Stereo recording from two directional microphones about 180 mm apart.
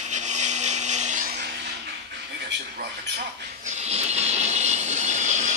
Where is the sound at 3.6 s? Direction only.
40° right (ahead or behind).